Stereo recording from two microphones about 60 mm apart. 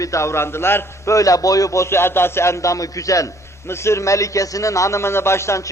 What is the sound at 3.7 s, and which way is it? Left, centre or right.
A man's voice, left.